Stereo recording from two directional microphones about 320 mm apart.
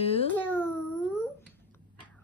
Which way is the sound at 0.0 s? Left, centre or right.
Centre.